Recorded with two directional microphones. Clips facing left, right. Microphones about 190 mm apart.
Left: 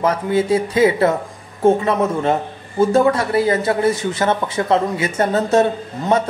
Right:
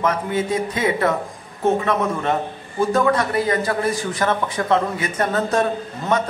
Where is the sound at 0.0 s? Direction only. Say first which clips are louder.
Left 4 dB; 30° left (ahead or behind).